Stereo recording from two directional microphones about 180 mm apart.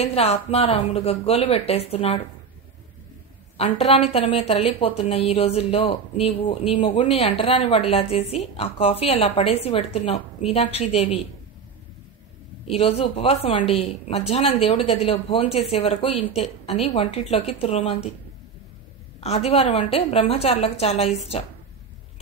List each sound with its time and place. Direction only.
0.0 s a woman's voice: 35° left (ahead or behind)
3.8 s a woman's voice: 35° left (ahead or behind)
12.6 s a woman's voice: 35° left (ahead or behind)
19.1 s a woman's voice: 35° left (ahead or behind)